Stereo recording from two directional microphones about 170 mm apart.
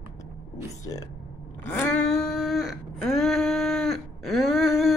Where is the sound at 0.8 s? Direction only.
20° left (ahead or behind).